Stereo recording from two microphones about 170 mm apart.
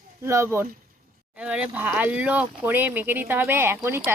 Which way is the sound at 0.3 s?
15° right (ahead or behind).